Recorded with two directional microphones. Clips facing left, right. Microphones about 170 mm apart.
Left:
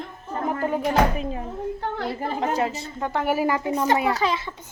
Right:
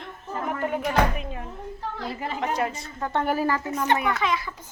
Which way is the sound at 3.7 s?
35° left (ahead or behind).